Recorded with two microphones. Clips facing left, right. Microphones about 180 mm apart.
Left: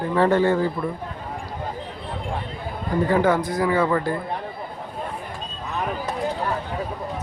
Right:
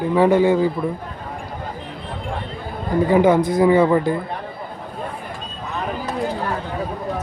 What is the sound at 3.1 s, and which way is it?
Speech, 20° right (ahead or behind).